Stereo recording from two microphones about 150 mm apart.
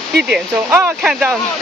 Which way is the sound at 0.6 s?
15° right (ahead or behind).